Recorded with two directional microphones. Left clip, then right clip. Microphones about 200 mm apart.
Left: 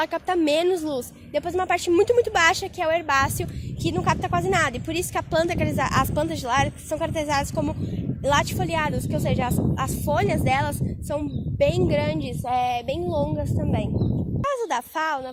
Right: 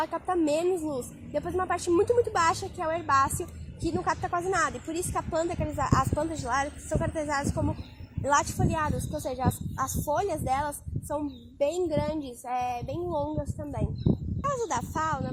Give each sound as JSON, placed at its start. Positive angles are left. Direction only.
{"t": 0.0, "sound": "speech", "side_deg": 40}
{"t": 4.2, "sound": "speech", "side_deg": 50}
{"t": 14.4, "sound": "speech", "side_deg": 35}